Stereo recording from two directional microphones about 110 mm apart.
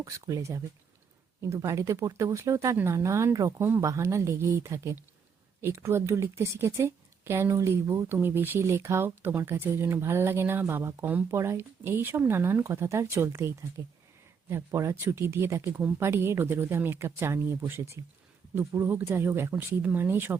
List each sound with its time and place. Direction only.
0.0 s a woman's voice: 30° right (ahead or behind)